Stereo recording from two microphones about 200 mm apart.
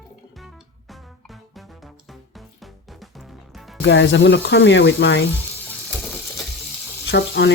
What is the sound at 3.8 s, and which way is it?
Speech, 60° left (ahead or behind).